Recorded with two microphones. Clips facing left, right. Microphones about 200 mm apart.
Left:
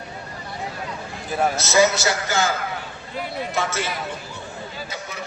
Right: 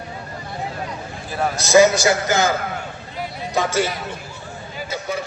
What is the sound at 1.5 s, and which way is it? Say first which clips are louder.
Speech: right 7 dB; 15° right (ahead or behind).